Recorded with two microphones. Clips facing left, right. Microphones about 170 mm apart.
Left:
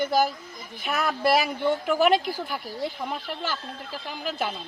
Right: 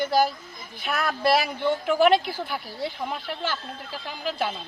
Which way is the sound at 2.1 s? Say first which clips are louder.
Right 1 dB; 45° left (ahead or behind).